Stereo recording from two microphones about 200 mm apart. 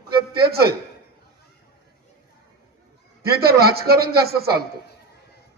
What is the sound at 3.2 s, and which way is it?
A man's voice, 50° right (ahead or behind).